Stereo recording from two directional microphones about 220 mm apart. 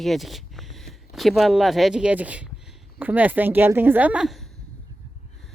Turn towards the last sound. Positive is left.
turn(degrees=0)  # may be behind; listen again after turning